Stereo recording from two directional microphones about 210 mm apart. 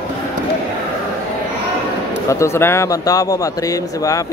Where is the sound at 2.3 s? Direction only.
15° left (ahead or behind).